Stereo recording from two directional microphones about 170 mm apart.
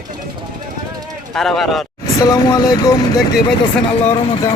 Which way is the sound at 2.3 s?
20° left (ahead or behind).